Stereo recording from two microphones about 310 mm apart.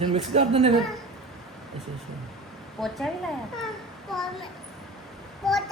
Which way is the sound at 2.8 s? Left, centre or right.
Centre.